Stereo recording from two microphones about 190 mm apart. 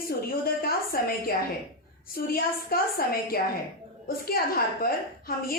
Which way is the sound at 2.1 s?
50° left (ahead or behind).